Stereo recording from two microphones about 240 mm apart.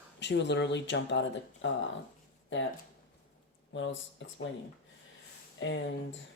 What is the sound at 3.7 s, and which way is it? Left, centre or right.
Speech, left.